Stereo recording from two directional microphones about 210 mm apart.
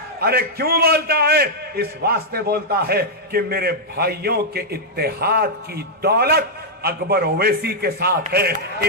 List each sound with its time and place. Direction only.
0.2 s a man's voice: 45° right (ahead or behind)